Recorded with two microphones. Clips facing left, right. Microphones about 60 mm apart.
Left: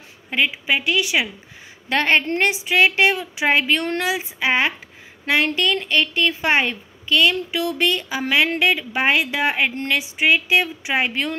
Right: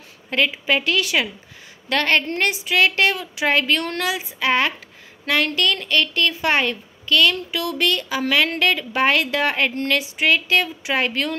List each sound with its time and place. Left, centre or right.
0.3 s a woman's voice: centre